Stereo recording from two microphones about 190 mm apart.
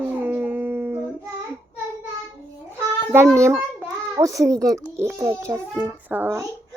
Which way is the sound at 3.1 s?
15° right (ahead or behind).